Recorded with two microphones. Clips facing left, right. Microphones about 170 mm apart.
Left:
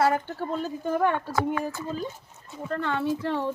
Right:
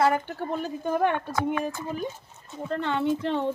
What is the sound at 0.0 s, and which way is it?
Speech, 15° right (ahead or behind).